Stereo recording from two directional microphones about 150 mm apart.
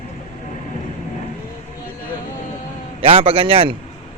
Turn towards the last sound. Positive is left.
turn(degrees=-35)  # may be behind; listen again after turning